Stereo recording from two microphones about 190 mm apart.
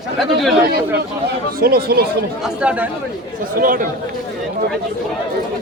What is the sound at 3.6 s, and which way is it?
Speech, 45° right (ahead or behind).